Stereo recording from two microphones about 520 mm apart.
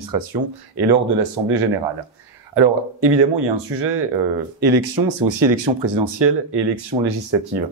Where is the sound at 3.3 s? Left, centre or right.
Right.